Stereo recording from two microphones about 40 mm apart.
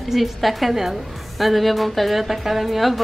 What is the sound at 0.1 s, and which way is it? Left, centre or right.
Speech, centre.